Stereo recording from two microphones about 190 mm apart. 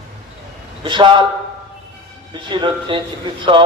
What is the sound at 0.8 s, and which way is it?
Speech, 25° right (ahead or behind).